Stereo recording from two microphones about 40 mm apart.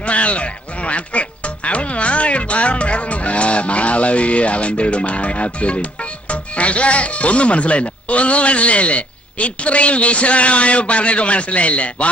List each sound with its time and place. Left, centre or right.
0.0 s speech: left